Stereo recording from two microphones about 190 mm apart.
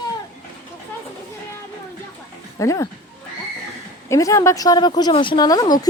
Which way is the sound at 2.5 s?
15° left (ahead or behind).